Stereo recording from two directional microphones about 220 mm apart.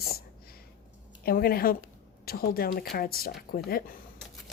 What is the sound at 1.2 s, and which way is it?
Speech, 45° left (ahead or behind).